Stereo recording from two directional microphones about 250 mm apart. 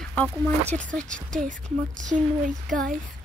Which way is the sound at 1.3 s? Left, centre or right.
Right.